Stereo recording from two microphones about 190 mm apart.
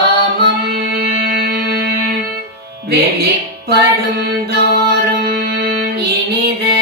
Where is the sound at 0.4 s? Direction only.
60° right (ahead or behind).